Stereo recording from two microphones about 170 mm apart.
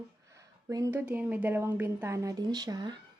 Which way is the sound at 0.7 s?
15° right (ahead or behind).